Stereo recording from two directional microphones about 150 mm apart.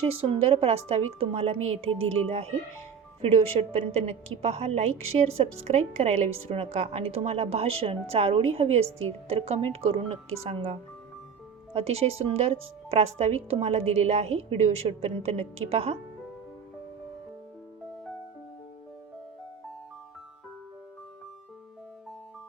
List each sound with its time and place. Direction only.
0.0 s a woman's voice: 40° right (ahead or behind)
3.2 s a woman's voice: 40° right (ahead or behind)